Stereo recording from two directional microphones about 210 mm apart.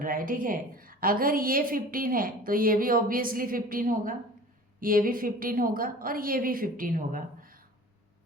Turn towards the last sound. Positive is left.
turn(degrees=-40)  # may be behind; listen again after turning